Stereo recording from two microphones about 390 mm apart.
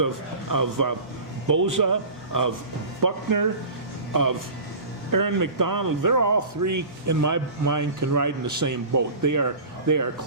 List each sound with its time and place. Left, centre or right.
0.5 s speech: right